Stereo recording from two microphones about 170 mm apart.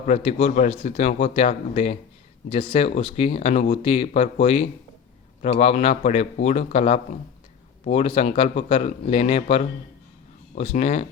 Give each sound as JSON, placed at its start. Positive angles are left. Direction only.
{"t": 0.0, "sound": "speech", "side_deg": 40}